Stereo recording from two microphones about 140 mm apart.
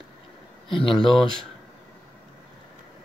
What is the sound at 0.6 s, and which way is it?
Speech, 35° left (ahead or behind).